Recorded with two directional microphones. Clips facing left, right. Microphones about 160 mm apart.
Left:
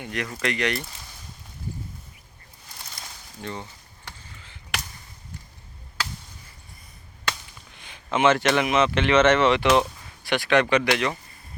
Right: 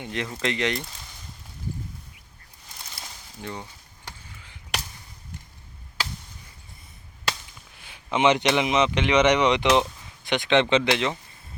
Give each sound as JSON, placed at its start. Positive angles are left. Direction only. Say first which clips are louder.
{"t": 0.0, "sound": "speech", "louder": "even", "side_deg": -25}
{"t": 3.0, "sound": "a sound", "louder": "right 1 dB", "side_deg": -5}
{"t": 3.4, "sound": "speech", "louder": "left 1 dB", "side_deg": -10}
{"t": 7.8, "sound": "speech", "louder": "left 1 dB", "side_deg": -10}